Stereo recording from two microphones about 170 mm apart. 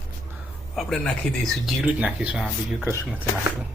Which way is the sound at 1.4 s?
Centre (ahead or behind).